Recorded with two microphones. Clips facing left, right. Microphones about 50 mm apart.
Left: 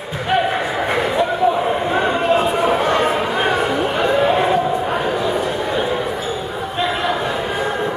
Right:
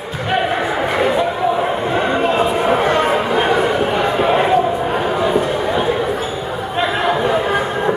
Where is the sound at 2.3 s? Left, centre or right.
Right.